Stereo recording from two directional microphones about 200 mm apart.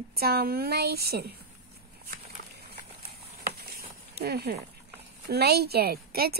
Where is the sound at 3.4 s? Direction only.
50° right (ahead or behind).